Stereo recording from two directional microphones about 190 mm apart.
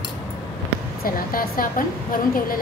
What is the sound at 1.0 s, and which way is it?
A woman's voice, 50° left (ahead or behind).